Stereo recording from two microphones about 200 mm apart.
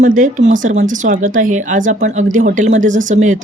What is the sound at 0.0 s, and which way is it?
Speech, 40° right (ahead or behind).